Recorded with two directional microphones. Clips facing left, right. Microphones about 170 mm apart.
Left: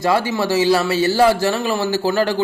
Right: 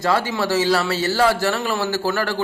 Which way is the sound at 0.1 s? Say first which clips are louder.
Left 2 dB; 15° left (ahead or behind).